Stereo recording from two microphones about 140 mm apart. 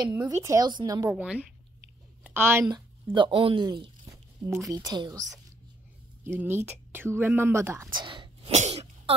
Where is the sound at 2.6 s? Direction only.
35° right (ahead or behind).